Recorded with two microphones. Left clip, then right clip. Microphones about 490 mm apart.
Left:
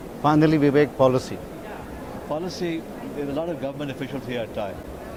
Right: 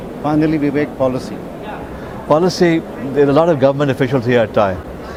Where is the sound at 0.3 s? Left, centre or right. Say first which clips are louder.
Right 3 dB; left.